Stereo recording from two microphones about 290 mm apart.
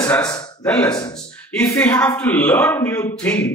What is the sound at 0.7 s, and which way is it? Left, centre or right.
Speech, centre.